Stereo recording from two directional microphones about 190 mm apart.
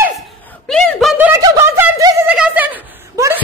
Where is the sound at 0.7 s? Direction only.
5° left (ahead or behind).